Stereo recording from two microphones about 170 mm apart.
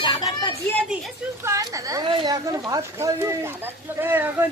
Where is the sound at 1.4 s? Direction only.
20° right (ahead or behind).